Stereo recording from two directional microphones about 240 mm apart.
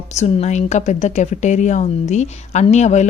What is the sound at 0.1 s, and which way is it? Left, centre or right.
A woman's voice, left.